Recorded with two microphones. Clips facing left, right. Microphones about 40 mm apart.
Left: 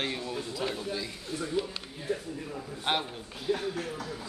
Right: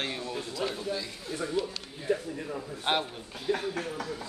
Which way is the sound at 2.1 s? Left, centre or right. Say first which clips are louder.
Right 4 dB; right.